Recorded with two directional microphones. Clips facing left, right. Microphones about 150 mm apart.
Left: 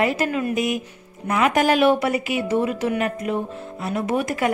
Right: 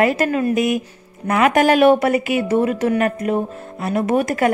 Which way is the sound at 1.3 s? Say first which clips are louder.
Right 4 dB; 60° right (ahead or behind).